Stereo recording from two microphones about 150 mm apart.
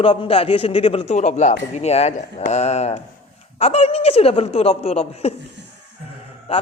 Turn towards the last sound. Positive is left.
turn(degrees=40)  # may be behind; listen again after turning